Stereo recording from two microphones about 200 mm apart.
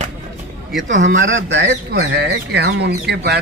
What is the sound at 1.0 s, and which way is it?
Speech, 65° right (ahead or behind).